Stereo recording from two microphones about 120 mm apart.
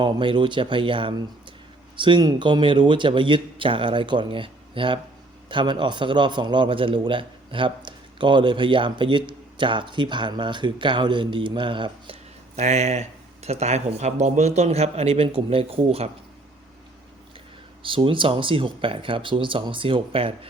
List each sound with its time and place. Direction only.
0.0 s a man's voice: 45° right (ahead or behind)
12.5 s speech: 70° right (ahead or behind); by 16.0 s 50° right (ahead or behind)
17.8 s speech: 45° right (ahead or behind)